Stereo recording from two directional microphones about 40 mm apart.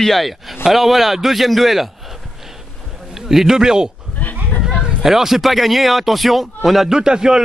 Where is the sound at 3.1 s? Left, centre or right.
Centre.